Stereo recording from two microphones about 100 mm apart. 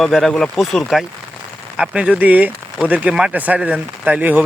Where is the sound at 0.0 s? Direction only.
5° left (ahead or behind).